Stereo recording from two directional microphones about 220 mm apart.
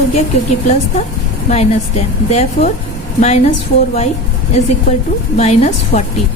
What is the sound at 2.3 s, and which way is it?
A woman's voice, 30° left (ahead or behind).